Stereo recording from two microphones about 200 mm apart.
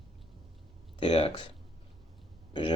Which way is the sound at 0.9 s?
25° left (ahead or behind).